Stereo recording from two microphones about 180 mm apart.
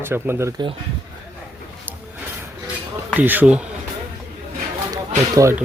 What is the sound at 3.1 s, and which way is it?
Speech, 10° right (ahead or behind).